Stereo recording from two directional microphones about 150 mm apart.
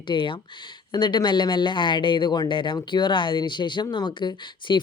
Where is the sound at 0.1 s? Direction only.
35° left (ahead or behind).